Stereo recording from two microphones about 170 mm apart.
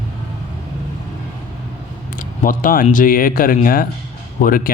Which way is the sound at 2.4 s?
55° left (ahead or behind).